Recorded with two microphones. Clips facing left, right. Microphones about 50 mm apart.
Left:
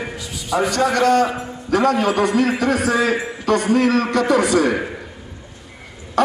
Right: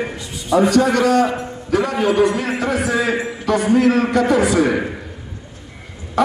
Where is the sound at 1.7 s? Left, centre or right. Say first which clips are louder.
Left 2 dB; left.